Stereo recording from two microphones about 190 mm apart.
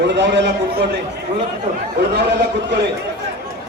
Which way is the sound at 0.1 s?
70° right (ahead or behind).